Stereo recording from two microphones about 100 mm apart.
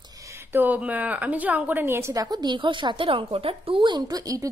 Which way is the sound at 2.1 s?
40° right (ahead or behind).